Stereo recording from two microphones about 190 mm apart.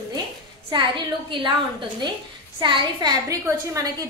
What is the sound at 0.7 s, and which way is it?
A woman's voice, 25° right (ahead or behind).